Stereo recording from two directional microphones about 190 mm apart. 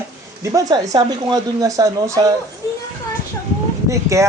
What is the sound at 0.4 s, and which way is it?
Speech, 20° right (ahead or behind).